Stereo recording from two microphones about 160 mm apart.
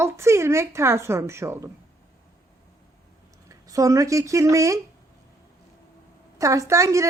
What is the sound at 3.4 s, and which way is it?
Speech, 20° right (ahead or behind).